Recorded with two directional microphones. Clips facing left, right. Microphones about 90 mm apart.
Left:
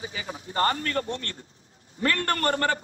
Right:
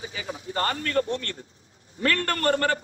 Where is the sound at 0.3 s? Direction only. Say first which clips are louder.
Left 2 dB; 25° left (ahead or behind).